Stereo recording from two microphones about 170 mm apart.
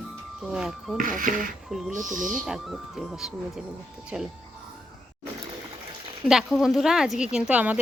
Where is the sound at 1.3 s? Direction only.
50° right (ahead or behind).